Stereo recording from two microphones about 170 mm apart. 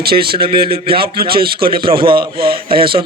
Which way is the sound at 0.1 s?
65° right (ahead or behind).